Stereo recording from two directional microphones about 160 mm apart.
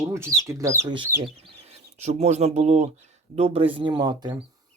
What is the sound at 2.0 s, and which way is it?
Speech, 45° right (ahead or behind).